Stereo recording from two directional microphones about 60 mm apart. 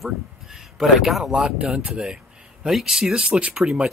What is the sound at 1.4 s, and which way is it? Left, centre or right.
Speech, centre.